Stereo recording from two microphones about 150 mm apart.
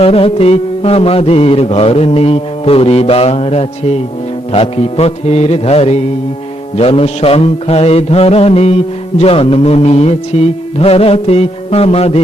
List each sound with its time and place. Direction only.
0.0 s music: 40° left (ahead or behind)